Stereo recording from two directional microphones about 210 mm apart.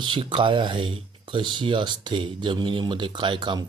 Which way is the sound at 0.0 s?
25° right (ahead or behind).